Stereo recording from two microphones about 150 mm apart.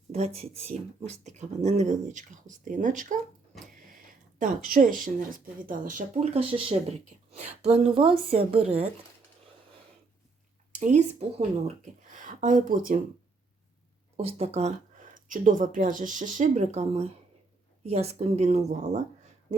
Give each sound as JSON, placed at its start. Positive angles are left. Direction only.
{"t": 0.1, "sound": "speech", "side_deg": -45}
{"t": 6.3, "sound": "speech", "side_deg": -35}
{"t": 10.8, "sound": "speech", "side_deg": -50}
{"t": 14.2, "sound": "speech", "side_deg": -45}
{"t": 15.1, "sound": "speech", "side_deg": -65}